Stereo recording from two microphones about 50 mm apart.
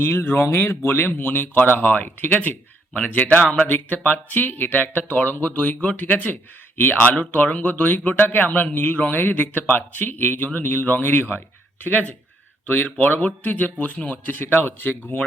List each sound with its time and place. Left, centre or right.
0.0 s speech: left
1.1 s a man's voice: left
5.5 s a man's voice: left